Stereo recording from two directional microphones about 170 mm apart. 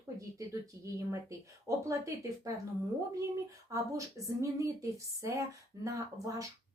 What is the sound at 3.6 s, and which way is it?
Speech, 20° right (ahead or behind).